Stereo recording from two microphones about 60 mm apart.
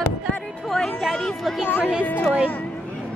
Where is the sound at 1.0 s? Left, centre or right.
Centre.